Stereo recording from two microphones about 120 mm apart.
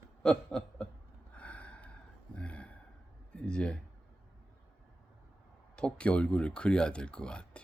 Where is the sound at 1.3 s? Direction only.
10° left (ahead or behind).